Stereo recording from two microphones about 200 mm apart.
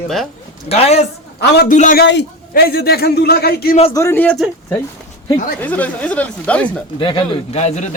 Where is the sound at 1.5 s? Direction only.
55° left (ahead or behind).